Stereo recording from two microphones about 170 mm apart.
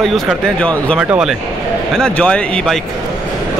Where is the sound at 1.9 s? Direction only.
5° left (ahead or behind).